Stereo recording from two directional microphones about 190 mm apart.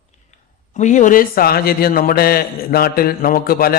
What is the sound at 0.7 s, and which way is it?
A man's voice, 40° left (ahead or behind).